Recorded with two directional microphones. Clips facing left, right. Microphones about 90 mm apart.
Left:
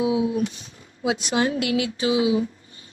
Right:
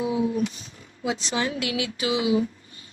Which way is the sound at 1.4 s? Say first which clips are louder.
Left 6 dB; 45° left (ahead or behind).